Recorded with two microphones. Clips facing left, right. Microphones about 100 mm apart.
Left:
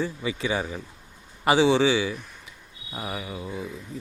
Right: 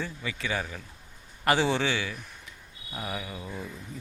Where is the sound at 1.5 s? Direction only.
5° left (ahead or behind).